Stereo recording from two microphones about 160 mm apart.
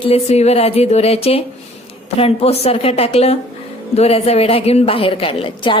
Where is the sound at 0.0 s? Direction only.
40° left (ahead or behind).